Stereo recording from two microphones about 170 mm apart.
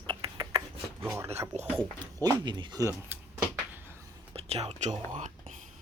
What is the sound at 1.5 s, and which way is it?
Speech, 40° right (ahead or behind).